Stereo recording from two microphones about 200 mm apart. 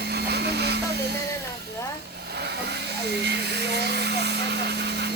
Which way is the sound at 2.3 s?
55° right (ahead or behind).